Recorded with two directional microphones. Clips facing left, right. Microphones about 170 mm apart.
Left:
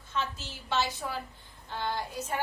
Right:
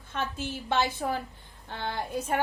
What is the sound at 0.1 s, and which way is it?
A woman's voice, 55° right (ahead or behind).